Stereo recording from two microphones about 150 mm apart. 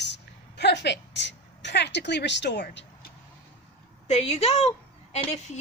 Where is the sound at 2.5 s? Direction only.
90° left.